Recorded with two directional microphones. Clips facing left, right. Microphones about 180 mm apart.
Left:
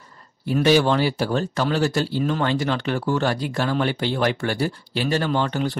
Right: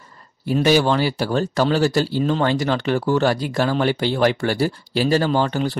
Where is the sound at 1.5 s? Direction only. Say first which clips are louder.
Right 4 dB; 40° right (ahead or behind).